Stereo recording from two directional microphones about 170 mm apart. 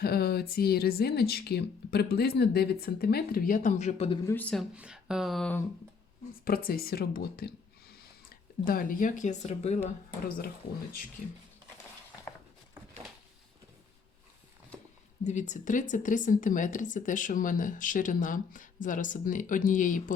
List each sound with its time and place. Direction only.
0.0 s speech: 65° left (ahead or behind); by 4.2 s 35° left (ahead or behind)
4.3 s speech: 10° left (ahead or behind)
4.7 s speech: 5° right (ahead or behind)
6.4 s speech: 60° left (ahead or behind); by 9.9 s 40° left (ahead or behind)
10.2 s speech: 60° left (ahead or behind)
15.2 s speech: 45° left (ahead or behind)